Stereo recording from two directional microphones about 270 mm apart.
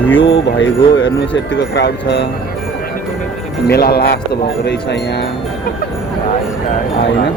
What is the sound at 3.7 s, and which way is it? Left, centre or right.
Speech, left.